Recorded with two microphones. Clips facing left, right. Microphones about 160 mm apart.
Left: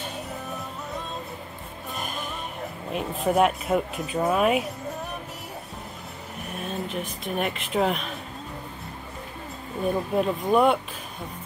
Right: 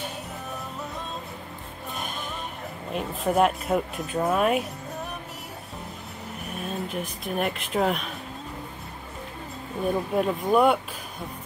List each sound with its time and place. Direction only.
2.0 s music: centre (ahead or behind)
2.9 s speech: centre (ahead or behind)
6.5 s speech: centre (ahead or behind)
10.1 s speech: centre (ahead or behind)